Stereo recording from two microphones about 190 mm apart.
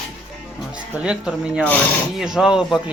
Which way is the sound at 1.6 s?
10° left (ahead or behind).